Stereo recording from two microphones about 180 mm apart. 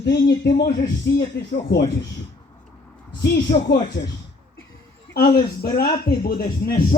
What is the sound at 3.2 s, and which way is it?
Speech, 70° left (ahead or behind).